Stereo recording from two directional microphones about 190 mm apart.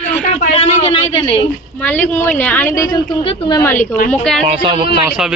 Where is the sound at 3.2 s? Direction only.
30° left (ahead or behind).